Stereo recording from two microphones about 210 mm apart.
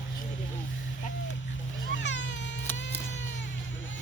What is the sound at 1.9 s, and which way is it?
Cat, 60° left (ahead or behind).